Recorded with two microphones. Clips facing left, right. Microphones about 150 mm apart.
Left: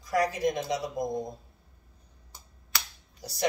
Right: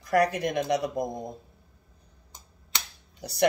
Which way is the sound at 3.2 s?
60° right (ahead or behind).